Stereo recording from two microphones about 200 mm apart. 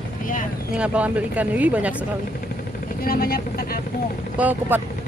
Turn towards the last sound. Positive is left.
turn(degrees=-10)  # may be behind; listen again after turning